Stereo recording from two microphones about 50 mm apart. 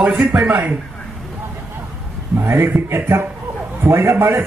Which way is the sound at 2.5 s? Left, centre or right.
Right.